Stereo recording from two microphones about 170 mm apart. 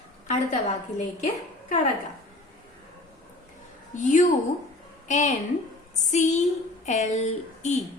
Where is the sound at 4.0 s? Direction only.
50° left (ahead or behind).